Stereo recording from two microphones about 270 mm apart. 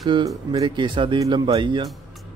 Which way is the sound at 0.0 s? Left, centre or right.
Centre.